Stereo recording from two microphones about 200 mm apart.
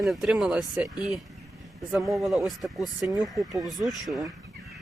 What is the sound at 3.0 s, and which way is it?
Speech, 15° right (ahead or behind).